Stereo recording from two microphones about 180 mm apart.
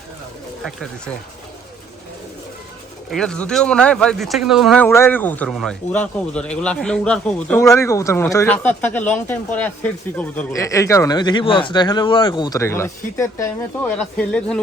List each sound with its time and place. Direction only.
0.6 s speech: centre (ahead or behind)
3.1 s speech: 5° left (ahead or behind)
4.9 s speech: 15° left (ahead or behind)